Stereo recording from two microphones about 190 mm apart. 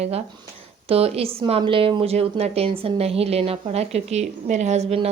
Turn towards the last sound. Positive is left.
turn(degrees=-35)  # may be behind; listen again after turning